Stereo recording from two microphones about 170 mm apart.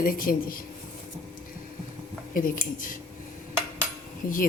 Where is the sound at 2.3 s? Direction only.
55° left (ahead or behind).